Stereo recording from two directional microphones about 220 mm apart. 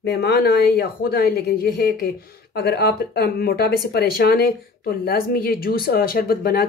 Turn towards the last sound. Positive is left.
turn(degrees=45)  # may be behind; listen again after turning